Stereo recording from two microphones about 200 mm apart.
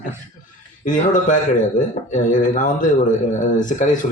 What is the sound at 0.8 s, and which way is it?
Speech, 40° left (ahead or behind).